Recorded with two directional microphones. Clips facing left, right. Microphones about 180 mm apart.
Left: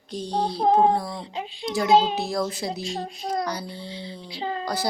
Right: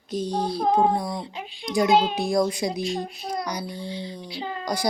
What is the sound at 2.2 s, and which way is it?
Speech, 15° right (ahead or behind).